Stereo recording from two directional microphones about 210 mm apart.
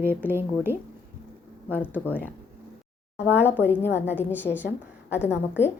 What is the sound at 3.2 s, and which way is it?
Speech, 10° right (ahead or behind).